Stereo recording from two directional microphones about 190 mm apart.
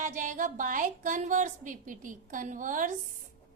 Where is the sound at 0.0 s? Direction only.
40° right (ahead or behind).